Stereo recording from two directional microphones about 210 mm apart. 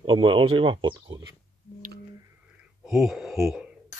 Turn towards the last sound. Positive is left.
turn(degrees=0)  # may be behind; listen again after turning